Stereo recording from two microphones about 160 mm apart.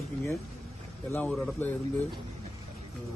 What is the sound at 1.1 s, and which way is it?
Speech, 10° left (ahead or behind).